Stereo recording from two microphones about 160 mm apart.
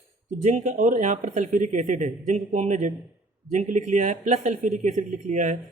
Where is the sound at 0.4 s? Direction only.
50° right (ahead or behind).